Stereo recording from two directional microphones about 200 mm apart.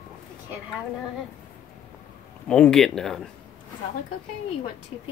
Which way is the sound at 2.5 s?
5° left (ahead or behind).